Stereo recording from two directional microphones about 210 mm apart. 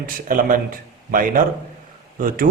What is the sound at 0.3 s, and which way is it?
Speech, 40° right (ahead or behind).